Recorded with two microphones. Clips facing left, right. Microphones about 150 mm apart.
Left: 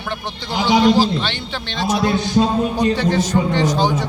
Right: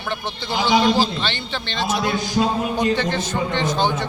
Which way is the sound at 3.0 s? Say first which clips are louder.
Left 5 dB; 10° left (ahead or behind).